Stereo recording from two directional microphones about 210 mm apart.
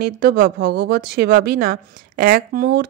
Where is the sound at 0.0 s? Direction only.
50° right (ahead or behind).